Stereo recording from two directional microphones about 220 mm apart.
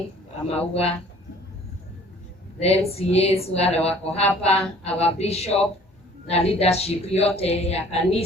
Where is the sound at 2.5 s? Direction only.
30° left (ahead or behind).